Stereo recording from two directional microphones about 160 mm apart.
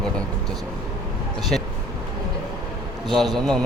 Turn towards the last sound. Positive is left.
turn(degrees=0)  # may be behind; listen again after turning